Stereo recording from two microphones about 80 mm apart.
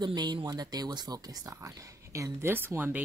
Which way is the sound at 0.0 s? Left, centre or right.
Right.